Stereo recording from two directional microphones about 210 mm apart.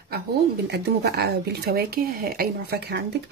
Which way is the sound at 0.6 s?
50° right (ahead or behind).